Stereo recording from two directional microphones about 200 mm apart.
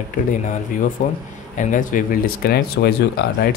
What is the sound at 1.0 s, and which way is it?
Speech, 35° left (ahead or behind).